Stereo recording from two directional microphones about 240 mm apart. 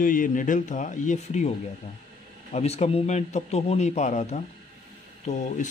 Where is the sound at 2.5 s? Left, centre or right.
Left.